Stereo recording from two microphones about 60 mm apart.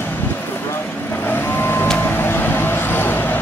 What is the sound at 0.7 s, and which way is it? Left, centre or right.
Vehicle, left.